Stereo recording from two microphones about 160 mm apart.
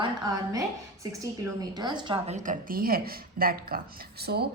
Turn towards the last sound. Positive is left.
turn(degrees=-80)